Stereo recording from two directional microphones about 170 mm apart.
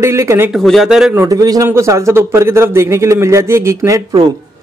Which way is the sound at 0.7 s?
Centre (ahead or behind).